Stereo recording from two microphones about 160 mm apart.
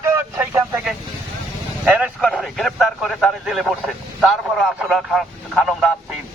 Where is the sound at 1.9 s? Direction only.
5° right (ahead or behind).